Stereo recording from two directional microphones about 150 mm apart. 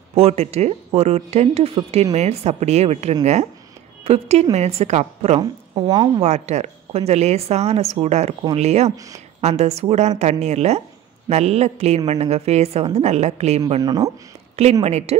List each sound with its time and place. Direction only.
0.1 s a woman's voice: 45° right (ahead or behind)
5.4 s a woman's voice: 30° right (ahead or behind)
6.2 s a woman's voice: 45° right (ahead or behind)
13.8 s a woman's voice: 25° right (ahead or behind)
14.6 s a woman's voice: 45° right (ahead or behind)